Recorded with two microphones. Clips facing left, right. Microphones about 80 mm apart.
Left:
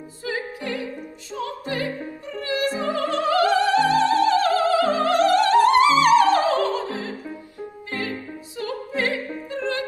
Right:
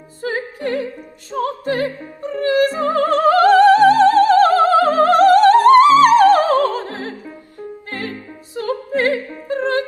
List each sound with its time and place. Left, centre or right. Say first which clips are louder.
0.2 s music: right 6 dB; right
1.3 s opera: right 8 dB; right
7.9 s music: right 1 dB; right
8.5 s opera: right 7 dB; right